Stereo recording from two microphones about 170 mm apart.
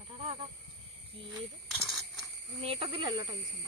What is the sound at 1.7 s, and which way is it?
Coin, centre (ahead or behind).